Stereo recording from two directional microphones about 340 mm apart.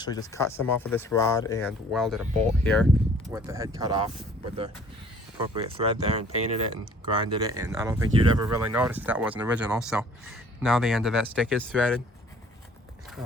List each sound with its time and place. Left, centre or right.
0.0 s speech: centre
3.3 s speech: centre
5.4 s speech: centre